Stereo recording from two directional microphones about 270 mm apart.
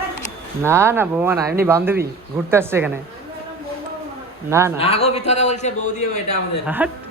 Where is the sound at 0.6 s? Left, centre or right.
Centre.